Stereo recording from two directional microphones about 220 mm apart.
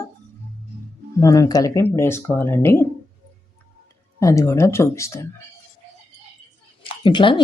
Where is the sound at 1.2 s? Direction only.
15° left (ahead or behind).